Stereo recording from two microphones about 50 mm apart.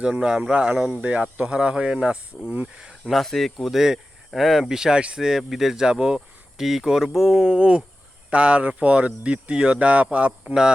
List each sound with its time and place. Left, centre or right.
0.0 s speech: right
1.0 s speech: right
3.1 s speech: centre; by 10.5 s right